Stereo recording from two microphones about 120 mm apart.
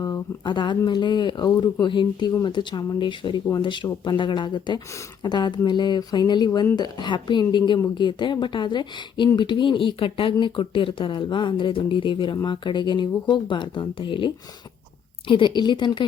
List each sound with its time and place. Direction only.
0.4 s speech: 40° left (ahead or behind)